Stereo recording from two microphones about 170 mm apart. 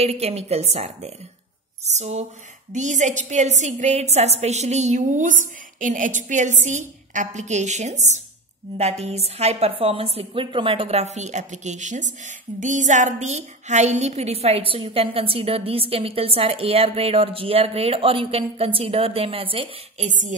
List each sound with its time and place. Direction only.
0.0 s a woman's voice: 35° right (ahead or behind)
20.1 s a woman's voice: 45° right (ahead or behind)